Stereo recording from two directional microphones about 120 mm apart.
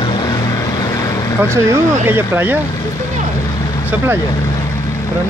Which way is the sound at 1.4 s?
20° right (ahead or behind).